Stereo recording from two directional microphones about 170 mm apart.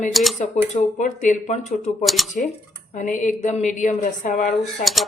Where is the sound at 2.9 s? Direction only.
45° left (ahead or behind).